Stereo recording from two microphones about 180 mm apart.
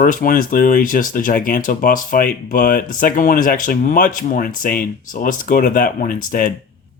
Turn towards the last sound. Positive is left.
turn(degrees=50)  # may be behind; listen again after turning